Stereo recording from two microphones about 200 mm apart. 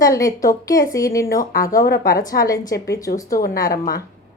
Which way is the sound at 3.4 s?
50° left (ahead or behind).